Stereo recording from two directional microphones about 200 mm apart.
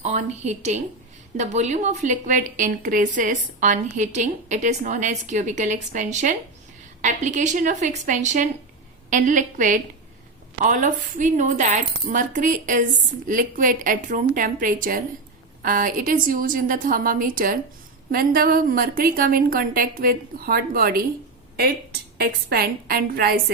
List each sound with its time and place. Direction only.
0.0 s a woman's voice: 35° right (ahead or behind)
22.2 s a woman's voice: 50° right (ahead or behind)